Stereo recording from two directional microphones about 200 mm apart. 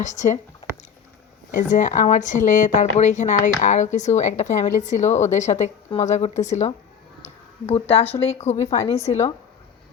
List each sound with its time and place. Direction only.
0.0 s speech: 35° left (ahead or behind)
1.5 s speech: 40° left (ahead or behind)
7.7 s speech: 30° left (ahead or behind)
8.6 s a woman's voice: 15° left (ahead or behind)